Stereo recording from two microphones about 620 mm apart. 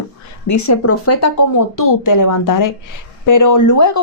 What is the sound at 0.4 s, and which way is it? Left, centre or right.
Speech, left.